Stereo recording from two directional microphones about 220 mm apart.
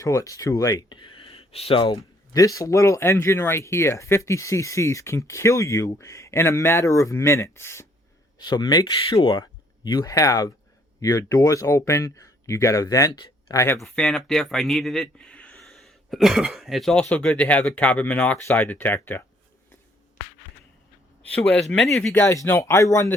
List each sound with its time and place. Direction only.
0.0 s speech: 15° left (ahead or behind)
13.7 s a man's voice: centre (ahead or behind)
21.2 s a man's voice: 5° left (ahead or behind)